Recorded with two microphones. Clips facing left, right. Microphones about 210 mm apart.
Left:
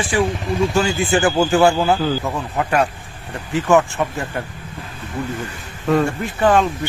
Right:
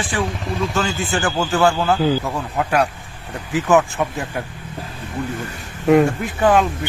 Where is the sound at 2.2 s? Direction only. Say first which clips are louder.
Left 1 dB; centre (ahead or behind).